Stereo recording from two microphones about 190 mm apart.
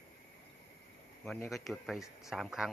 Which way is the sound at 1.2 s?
5° left (ahead or behind).